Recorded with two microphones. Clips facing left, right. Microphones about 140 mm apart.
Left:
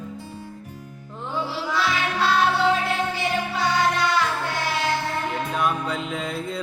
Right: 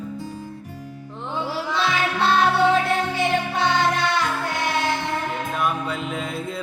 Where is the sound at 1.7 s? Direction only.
25° right (ahead or behind).